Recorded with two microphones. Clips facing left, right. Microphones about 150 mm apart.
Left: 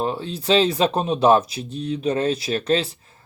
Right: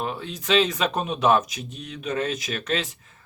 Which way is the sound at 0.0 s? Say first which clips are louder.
Left 5 dB; 30° left (ahead or behind).